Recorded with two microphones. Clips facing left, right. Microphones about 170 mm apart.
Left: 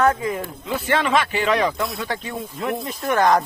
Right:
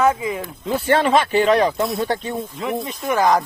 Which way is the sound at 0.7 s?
35° right (ahead or behind).